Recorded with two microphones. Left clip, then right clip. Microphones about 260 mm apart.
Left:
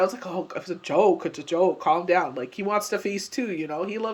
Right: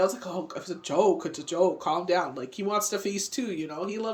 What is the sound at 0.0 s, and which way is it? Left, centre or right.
Speech, centre.